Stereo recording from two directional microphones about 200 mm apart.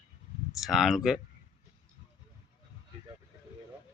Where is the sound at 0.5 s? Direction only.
Centre (ahead or behind).